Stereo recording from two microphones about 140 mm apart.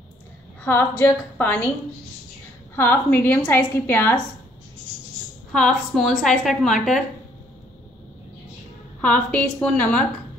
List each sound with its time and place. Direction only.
0.7 s a woman's voice: 15° left (ahead or behind)
2.7 s a woman's voice: 15° left (ahead or behind)
5.5 s a woman's voice: centre (ahead or behind)
9.0 s a woman's voice: 10° left (ahead or behind)